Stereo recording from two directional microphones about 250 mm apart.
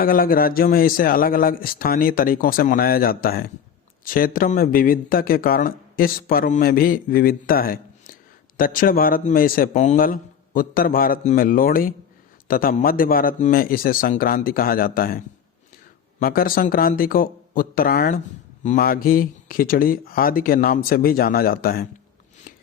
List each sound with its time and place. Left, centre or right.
0.0 s speech: left
16.2 s speech: left